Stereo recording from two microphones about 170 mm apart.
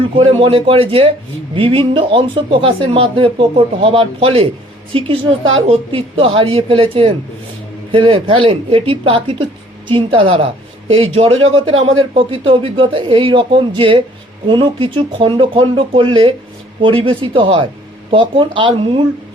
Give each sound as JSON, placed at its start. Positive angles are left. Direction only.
{"t": 0.3, "sound": "speech", "side_deg": -35}